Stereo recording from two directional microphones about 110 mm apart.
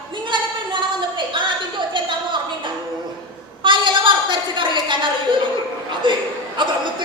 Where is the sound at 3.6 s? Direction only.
45° right (ahead or behind).